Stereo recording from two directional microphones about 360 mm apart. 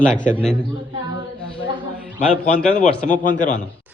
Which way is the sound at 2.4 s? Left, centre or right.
Centre.